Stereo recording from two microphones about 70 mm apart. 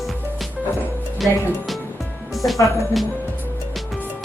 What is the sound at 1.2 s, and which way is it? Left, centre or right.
Speech, centre.